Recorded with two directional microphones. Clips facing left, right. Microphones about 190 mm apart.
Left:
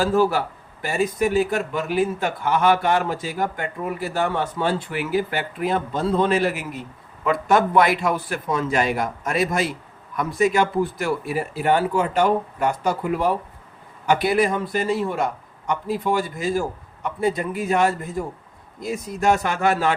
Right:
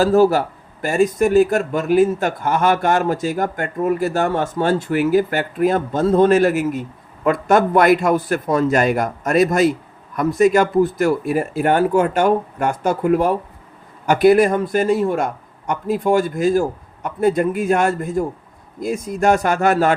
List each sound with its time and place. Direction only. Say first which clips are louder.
0.0 s speech: right 6 dB; 40° right (ahead or behind)